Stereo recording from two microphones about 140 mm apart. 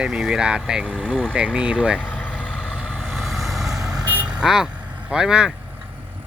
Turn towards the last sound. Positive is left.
turn(degrees=-5)  # may be behind; listen again after turning